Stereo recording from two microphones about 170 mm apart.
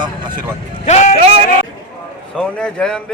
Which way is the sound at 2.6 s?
5° left (ahead or behind).